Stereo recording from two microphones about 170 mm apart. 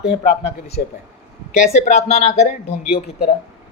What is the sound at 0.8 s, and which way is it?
A man's voice, 50° left (ahead or behind).